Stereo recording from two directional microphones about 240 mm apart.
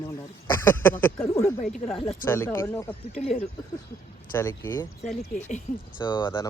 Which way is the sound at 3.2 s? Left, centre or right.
Left.